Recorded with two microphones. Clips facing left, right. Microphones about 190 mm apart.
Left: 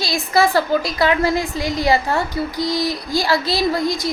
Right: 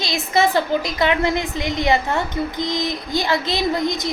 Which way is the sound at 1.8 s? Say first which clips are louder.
Left 1 dB; 35° left (ahead or behind).